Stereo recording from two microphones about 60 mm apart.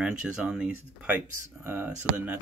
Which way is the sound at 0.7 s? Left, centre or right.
Right.